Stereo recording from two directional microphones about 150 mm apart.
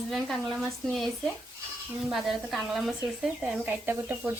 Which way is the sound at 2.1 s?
Centre (ahead or behind).